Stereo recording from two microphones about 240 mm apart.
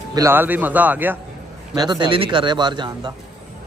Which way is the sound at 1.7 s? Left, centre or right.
Centre.